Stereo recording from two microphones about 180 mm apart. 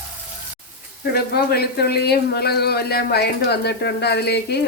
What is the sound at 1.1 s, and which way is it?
Speech, 60° left (ahead or behind).